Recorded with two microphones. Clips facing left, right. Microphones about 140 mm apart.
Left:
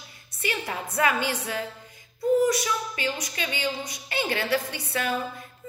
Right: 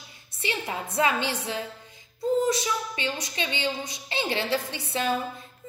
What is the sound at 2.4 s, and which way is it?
A woman's voice, 25° right (ahead or behind).